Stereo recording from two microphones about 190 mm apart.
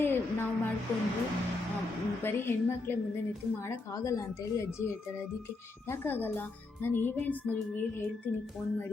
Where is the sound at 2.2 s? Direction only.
10° left (ahead or behind).